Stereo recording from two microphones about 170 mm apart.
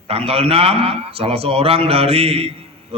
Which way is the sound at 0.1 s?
35° right (ahead or behind).